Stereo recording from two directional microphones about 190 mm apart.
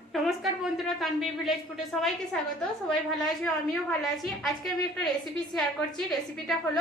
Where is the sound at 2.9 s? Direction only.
Centre (ahead or behind).